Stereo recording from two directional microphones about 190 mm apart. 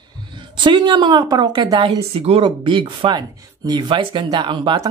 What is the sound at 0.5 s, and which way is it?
Speech, 25° right (ahead or behind).